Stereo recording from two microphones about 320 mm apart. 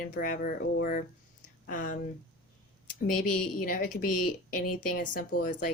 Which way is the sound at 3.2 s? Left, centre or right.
Left.